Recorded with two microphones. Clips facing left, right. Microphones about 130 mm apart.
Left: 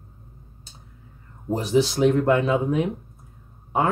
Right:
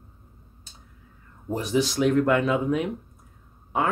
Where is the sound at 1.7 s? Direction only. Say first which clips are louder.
Left 3 dB; 25° left (ahead or behind).